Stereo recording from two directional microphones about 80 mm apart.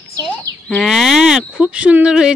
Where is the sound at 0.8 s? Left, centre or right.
Centre.